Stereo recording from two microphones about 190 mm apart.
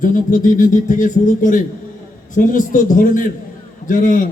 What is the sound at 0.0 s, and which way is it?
A man's voice, 45° left (ahead or behind).